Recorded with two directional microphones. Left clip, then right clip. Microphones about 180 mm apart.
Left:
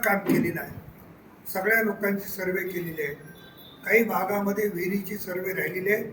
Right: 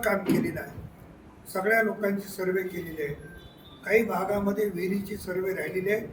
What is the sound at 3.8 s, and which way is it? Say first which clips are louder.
Speech: left 2 dB; centre (ahead or behind).